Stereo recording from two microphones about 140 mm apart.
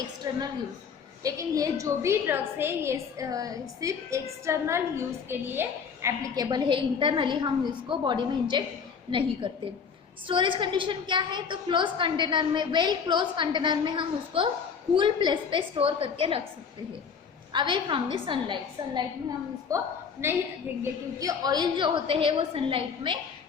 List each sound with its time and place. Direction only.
0.2 s a sound: 30° right (ahead or behind)
1.2 s a woman's voice: 25° right (ahead or behind); by 16.4 s 40° right (ahead or behind)
17.5 s a woman's voice: 35° right (ahead or behind)